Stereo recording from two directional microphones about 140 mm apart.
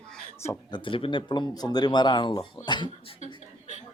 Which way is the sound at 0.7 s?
40° left (ahead or behind).